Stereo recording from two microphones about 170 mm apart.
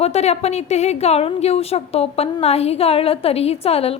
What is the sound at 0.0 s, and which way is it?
A woman's voice, 40° left (ahead or behind).